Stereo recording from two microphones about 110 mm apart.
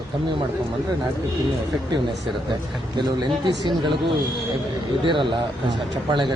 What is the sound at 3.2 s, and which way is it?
Speech, 45° right (ahead or behind).